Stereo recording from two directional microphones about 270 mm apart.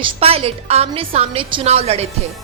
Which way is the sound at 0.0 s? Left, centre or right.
Right.